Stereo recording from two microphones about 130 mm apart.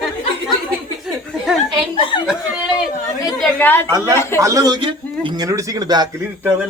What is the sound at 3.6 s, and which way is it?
Speech, 15° left (ahead or behind).